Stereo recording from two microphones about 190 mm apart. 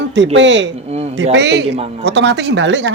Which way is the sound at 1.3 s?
65° right (ahead or behind).